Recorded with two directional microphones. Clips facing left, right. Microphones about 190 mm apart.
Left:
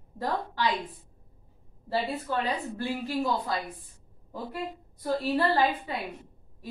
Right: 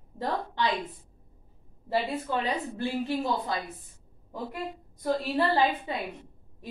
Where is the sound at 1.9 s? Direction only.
20° right (ahead or behind).